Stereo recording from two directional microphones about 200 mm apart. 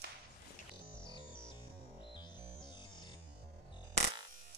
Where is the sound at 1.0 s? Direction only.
20° right (ahead or behind).